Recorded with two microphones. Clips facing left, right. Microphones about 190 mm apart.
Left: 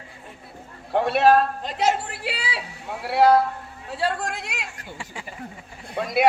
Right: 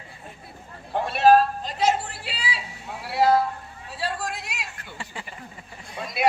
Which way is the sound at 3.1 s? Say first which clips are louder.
Left 3 dB; 65° left (ahead or behind).